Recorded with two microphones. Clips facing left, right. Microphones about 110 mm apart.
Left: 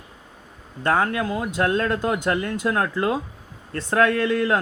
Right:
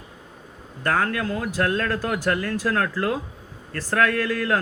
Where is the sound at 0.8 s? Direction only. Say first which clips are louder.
Left 2 dB; 25° left (ahead or behind).